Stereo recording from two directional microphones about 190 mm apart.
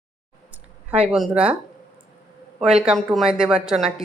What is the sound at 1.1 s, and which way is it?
Speech, 5° right (ahead or behind).